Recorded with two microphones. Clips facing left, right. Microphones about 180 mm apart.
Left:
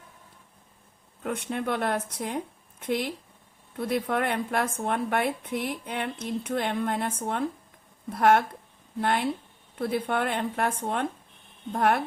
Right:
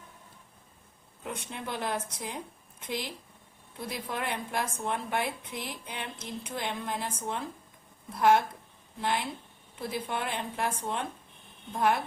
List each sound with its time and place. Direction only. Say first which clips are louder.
1.2 s a woman's voice: left 8 dB; 60° left (ahead or behind)
3.8 s a woman's voice: left 9 dB; 60° left (ahead or behind)